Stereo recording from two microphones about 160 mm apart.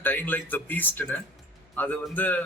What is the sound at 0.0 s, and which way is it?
A man's voice, 10° left (ahead or behind).